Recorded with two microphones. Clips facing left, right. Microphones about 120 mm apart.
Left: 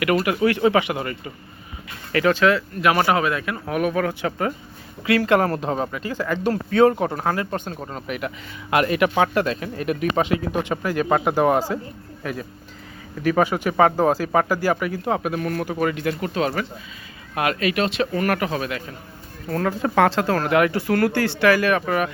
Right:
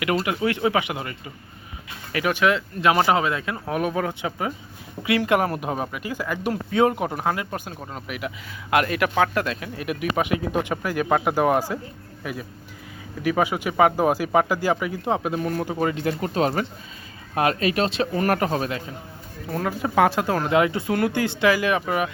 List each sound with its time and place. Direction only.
0.2 s speech: 20° right (ahead or behind)
10.2 s speech: 15° right (ahead or behind); by 18.8 s 35° right (ahead or behind)
19.5 s speech: 5° right (ahead or behind)